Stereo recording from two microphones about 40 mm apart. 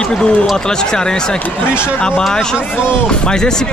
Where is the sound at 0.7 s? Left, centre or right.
Centre.